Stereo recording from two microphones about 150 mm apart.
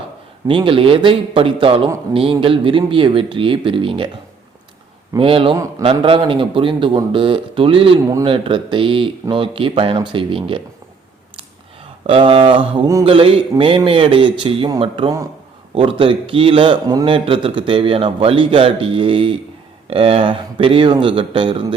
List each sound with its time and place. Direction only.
0.4 s a man's voice: 35° right (ahead or behind)
5.1 s a man's voice: 35° right (ahead or behind)
12.0 s a man's voice: 40° right (ahead or behind)
16.8 s a man's voice: 25° right (ahead or behind)
17.2 s a man's voice: 35° right (ahead or behind)